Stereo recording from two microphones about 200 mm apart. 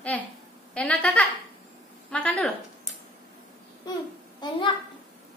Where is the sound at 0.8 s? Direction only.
5° left (ahead or behind).